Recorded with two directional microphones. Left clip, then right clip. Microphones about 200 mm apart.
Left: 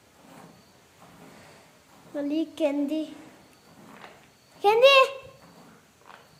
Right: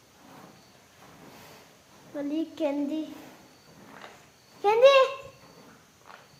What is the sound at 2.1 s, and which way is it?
Child singing, 15° left (ahead or behind).